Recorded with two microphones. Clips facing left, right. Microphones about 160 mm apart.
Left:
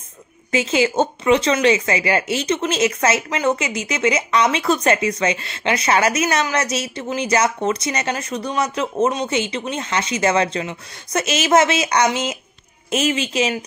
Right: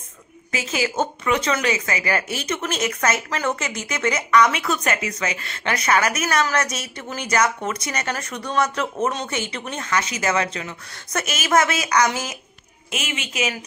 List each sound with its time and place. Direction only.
0.5 s a woman's voice: 25° left (ahead or behind)
12.9 s speech: 35° left (ahead or behind)